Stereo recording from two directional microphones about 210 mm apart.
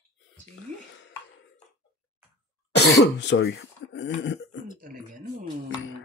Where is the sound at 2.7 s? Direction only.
55° left (ahead or behind).